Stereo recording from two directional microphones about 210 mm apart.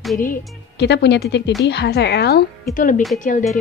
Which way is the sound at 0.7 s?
55° left (ahead or behind).